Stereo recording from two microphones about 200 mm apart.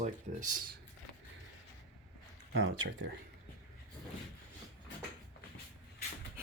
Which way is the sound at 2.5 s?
70° right (ahead or behind).